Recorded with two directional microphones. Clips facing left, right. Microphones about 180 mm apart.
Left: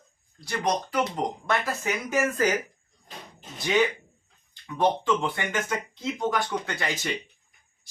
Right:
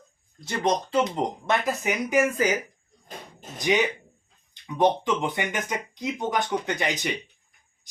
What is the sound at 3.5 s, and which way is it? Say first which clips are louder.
Speech: even; 15° right (ahead or behind).